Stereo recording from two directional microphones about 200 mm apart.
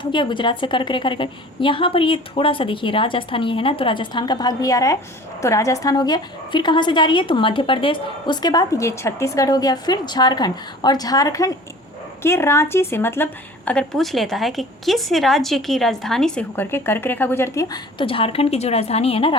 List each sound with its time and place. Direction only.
0.0 s a woman's voice: 25° left (ahead or behind)